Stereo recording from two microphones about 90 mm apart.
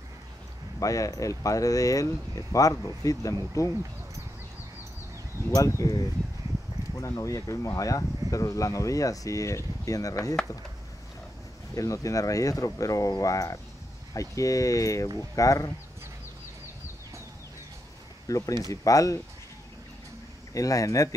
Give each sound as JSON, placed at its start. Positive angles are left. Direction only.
{"t": 0.7, "sound": "speech", "side_deg": 40}
{"t": 5.5, "sound": "speech", "side_deg": 35}
{"t": 7.0, "sound": "speech", "side_deg": 35}
{"t": 11.7, "sound": "speech", "side_deg": 35}
{"t": 18.3, "sound": "speech", "side_deg": 40}
{"t": 20.5, "sound": "speech", "side_deg": 40}